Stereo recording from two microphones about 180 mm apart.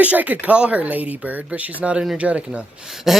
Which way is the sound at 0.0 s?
10° right (ahead or behind).